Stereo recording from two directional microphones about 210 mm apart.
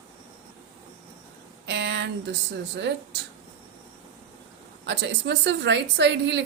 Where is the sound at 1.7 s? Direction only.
55° right (ahead or behind).